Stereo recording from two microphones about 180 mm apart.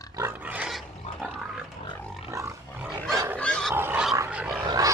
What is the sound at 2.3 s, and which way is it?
Wild animals, 15° right (ahead or behind).